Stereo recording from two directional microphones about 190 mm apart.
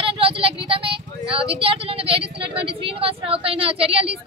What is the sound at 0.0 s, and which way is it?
A woman's voice, 30° right (ahead or behind).